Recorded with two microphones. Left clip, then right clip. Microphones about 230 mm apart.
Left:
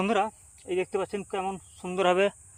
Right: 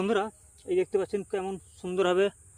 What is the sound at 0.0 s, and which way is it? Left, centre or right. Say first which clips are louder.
Speech: left 2 dB; centre.